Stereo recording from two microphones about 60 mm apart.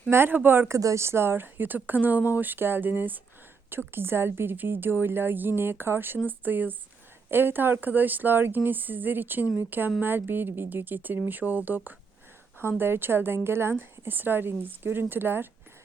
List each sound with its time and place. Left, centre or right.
0.1 s a woman's voice: right
0.7 s speech: right
1.0 s a woman's voice: right